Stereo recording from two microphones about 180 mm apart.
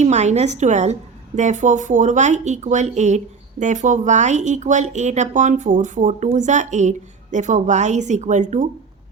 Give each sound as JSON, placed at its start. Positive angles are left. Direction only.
{"t": 0.0, "sound": "speech", "side_deg": -40}